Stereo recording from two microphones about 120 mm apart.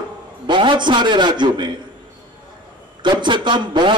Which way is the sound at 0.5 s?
40° right (ahead or behind).